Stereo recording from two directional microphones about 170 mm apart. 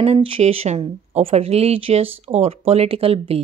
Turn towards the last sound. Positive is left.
turn(degrees=-35)  # may be behind; listen again after turning